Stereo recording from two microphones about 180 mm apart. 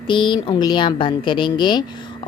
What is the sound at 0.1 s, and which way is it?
A woman's voice, 25° left (ahead or behind).